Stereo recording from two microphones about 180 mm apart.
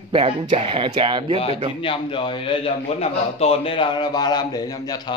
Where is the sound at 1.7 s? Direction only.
30° left (ahead or behind).